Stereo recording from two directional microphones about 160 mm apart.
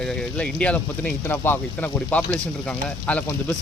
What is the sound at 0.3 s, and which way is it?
Speech, 5° left (ahead or behind).